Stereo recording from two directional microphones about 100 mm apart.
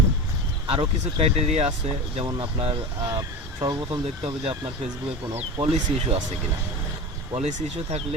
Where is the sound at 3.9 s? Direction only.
75° right (ahead or behind).